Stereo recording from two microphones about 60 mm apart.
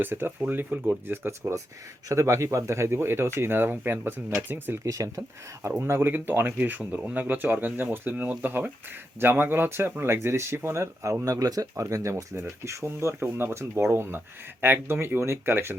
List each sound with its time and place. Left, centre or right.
0.0 s speech: right
1.3 s speech: right
4.9 s speech: right
5.8 s speech: right
11.3 s speech: right
12.4 s speech: right
13.5 s speech: right